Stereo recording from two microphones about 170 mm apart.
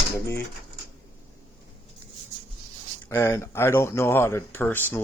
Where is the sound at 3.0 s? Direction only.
15° left (ahead or behind).